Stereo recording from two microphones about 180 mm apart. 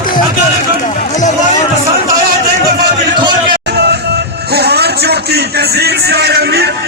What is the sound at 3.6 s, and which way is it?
Music, 65° right (ahead or behind).